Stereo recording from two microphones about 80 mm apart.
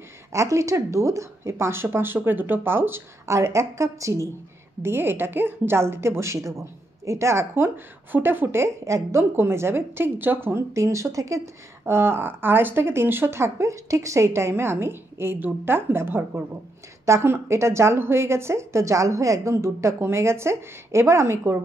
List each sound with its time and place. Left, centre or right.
0.3 s a woman's voice: right
3.3 s a woman's voice: right
4.8 s a woman's voice: right
11.8 s a woman's voice: right